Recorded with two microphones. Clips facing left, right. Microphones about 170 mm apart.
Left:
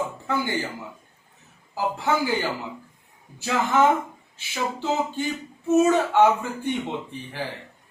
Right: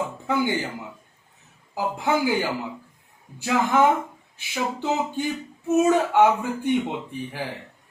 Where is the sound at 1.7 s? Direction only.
15° right (ahead or behind).